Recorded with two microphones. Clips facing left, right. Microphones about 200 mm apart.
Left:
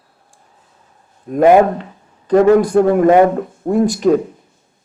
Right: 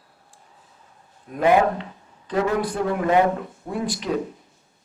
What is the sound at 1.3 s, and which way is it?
Speech, 50° left (ahead or behind).